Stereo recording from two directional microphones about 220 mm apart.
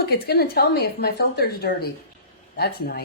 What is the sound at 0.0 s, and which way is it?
Speech, 45° left (ahead or behind).